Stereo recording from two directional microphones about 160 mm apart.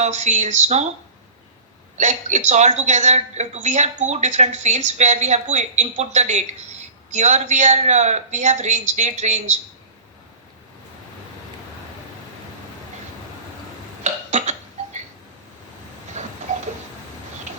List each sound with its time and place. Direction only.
0.0 s a woman's voice: 45° right (ahead or behind)
2.0 s a woman's voice: 50° right (ahead or behind)
14.0 s burping: 45° right (ahead or behind)
16.2 s a sound: 50° right (ahead or behind)